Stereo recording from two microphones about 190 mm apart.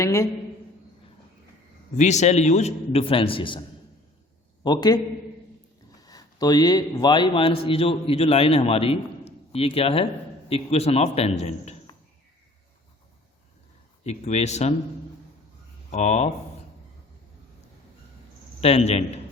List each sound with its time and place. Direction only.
0.0 s a man's voice: 15° left (ahead or behind)
2.0 s a man's voice: 40° left (ahead or behind)
4.6 s a man's voice: 20° left (ahead or behind)
6.0 s a man's voice: 20° left (ahead or behind)
14.0 s a man's voice: 35° left (ahead or behind)
15.9 s a man's voice: 35° left (ahead or behind)
18.6 s a man's voice: 35° left (ahead or behind)